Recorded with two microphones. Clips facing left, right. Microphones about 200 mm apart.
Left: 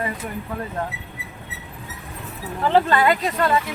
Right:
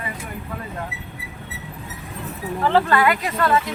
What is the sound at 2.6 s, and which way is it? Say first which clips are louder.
Speech: even; 20° left (ahead or behind).